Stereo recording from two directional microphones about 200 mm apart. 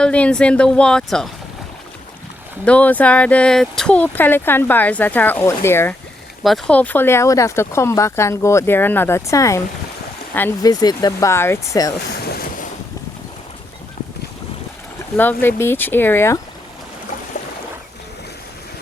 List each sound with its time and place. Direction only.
0.0 s speech: 5° left (ahead or behind)
2.6 s speech: 5° left (ahead or behind)
6.4 s speech: centre (ahead or behind); by 11.9 s 15° left (ahead or behind)
12.0 s boat: 55° left (ahead or behind)
15.1 s speech: 10° left (ahead or behind)